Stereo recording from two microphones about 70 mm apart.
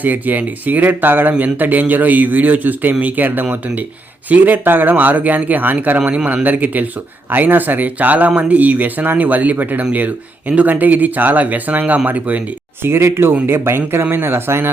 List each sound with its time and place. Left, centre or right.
0.0 s speech: right
12.8 s speech: right